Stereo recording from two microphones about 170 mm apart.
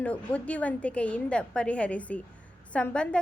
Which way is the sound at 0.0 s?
10° left (ahead or behind).